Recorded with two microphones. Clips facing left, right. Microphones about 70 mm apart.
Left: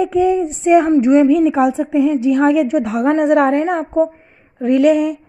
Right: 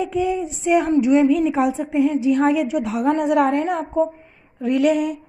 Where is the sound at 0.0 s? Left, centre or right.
Left.